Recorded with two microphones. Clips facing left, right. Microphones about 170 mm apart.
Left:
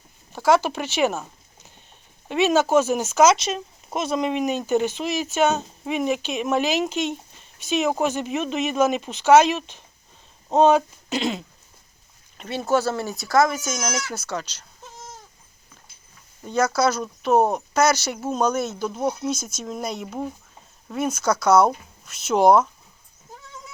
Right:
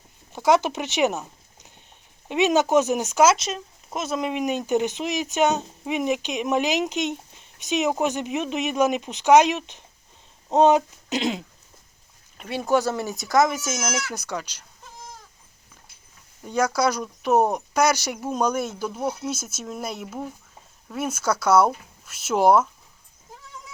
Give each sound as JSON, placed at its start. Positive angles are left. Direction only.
{"t": 0.3, "sound": "speech", "side_deg": -20}
{"t": 2.3, "sound": "speech", "side_deg": -15}
{"t": 16.4, "sound": "speech", "side_deg": -10}
{"t": 20.1, "sound": "speech", "side_deg": 15}
{"t": 20.9, "sound": "speech", "side_deg": -10}